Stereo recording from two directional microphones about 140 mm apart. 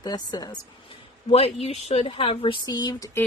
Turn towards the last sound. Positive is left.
turn(degrees=25)  # may be behind; listen again after turning